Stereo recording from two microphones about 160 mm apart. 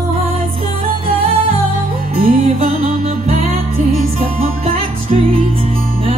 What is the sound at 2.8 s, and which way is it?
Music, 45° right (ahead or behind).